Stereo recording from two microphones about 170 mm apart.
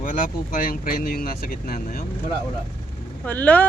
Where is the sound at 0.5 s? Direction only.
60° left (ahead or behind).